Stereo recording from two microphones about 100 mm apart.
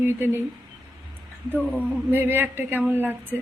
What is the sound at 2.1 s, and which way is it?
A woman's voice, 20° right (ahead or behind).